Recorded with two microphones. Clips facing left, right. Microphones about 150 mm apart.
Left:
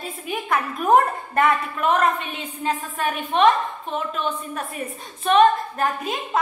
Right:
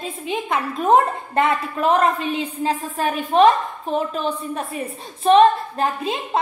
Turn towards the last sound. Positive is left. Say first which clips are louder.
# right 2 dB
turn(degrees=-30)  # may be behind; listen again after turning